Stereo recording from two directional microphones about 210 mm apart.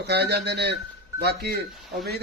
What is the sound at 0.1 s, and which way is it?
A man's voice, 50° right (ahead or behind).